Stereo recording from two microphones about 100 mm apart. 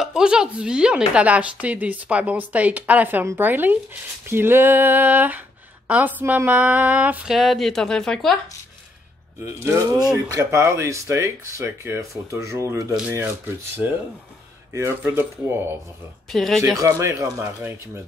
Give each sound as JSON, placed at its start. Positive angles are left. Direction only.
{"t": 0.0, "sound": "a woman's voice", "side_deg": -5}
{"t": 7.3, "sound": "speech", "side_deg": 0}
{"t": 9.4, "sound": "speech", "side_deg": -25}
{"t": 13.8, "sound": "a woman's voice", "side_deg": -15}
{"t": 14.7, "sound": "speech", "side_deg": -25}
{"t": 16.3, "sound": "speech", "side_deg": 0}
{"t": 16.8, "sound": "speech", "side_deg": -30}